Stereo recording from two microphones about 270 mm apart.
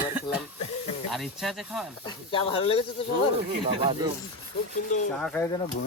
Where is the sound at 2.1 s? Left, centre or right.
Centre.